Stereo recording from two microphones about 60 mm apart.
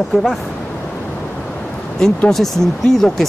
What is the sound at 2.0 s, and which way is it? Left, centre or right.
Speech, centre.